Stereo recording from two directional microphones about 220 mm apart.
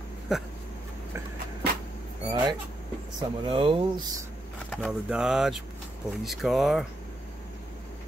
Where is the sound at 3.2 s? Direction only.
25° right (ahead or behind).